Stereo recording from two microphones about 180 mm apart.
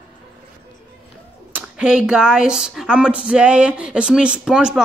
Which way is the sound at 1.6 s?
5° right (ahead or behind).